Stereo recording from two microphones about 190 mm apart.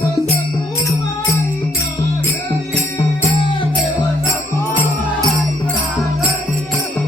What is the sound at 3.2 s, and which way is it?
Music, 25° left (ahead or behind).